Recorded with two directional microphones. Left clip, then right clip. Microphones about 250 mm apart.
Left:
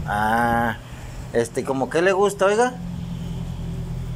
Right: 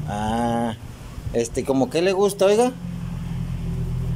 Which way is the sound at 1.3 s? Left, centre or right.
Centre.